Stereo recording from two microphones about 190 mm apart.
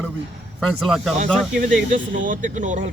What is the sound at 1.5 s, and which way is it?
Speech, 45° right (ahead or behind).